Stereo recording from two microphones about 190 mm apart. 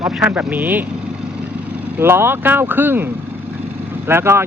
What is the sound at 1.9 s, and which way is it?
Speech, 10° right (ahead or behind).